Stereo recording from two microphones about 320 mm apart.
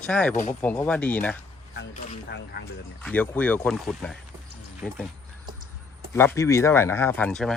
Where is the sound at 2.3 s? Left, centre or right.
Left.